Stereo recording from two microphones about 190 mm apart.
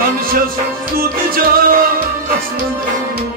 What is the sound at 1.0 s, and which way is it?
Music, 50° right (ahead or behind).